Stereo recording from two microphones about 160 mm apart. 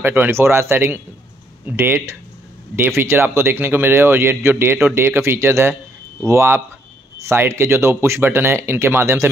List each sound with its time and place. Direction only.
0.0 s a man's voice: 10° right (ahead or behind)